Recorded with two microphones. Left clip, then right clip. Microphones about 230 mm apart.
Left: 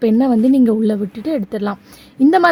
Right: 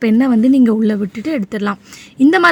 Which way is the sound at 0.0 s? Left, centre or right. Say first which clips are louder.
Right 1 dB; right.